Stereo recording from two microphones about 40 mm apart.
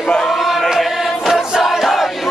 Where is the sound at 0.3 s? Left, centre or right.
Centre.